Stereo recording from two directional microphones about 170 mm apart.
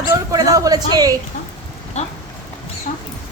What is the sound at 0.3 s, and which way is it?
Speech, 20° right (ahead or behind).